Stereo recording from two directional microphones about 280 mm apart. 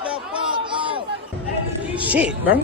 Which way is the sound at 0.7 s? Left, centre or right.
Centre.